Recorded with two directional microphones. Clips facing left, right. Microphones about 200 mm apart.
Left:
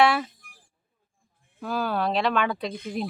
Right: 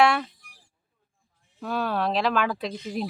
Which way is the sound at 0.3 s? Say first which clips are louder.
Left 1 dB; 50° left (ahead or behind).